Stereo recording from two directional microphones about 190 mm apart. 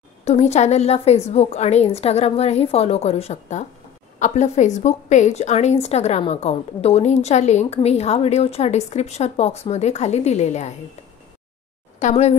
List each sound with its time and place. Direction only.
0.2 s a woman's voice: 35° left (ahead or behind)
12.0 s a woman's voice: 35° left (ahead or behind)